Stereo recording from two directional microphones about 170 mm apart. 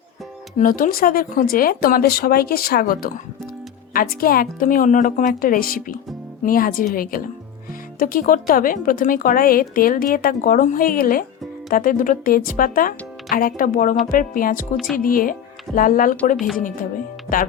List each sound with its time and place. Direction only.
0.6 s speech: 55° left (ahead or behind)